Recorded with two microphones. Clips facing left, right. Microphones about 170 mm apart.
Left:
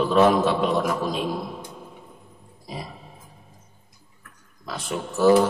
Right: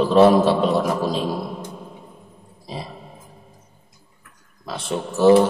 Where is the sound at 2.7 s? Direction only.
25° right (ahead or behind).